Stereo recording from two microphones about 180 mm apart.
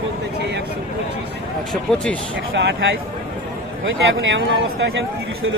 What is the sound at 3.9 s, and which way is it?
Speech, 90° right.